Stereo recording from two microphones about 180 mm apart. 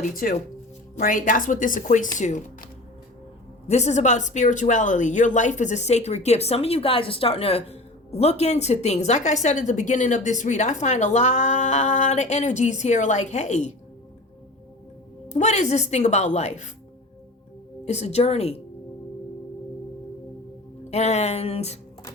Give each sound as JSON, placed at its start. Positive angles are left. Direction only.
{"t": 0.0, "sound": "speech", "side_deg": 50}
{"t": 3.7, "sound": "speech", "side_deg": 40}
{"t": 15.3, "sound": "speech", "side_deg": 40}
{"t": 17.8, "sound": "speech", "side_deg": 40}
{"t": 20.9, "sound": "speech", "side_deg": 40}